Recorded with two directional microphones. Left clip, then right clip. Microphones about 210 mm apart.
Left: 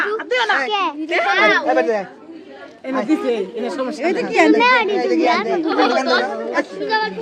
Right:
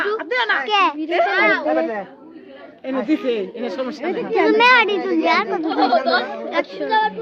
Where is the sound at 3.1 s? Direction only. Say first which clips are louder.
Left 2 dB; 45° right (ahead or behind).